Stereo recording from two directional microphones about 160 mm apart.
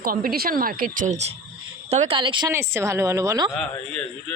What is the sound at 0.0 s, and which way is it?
Speech, 65° right (ahead or behind).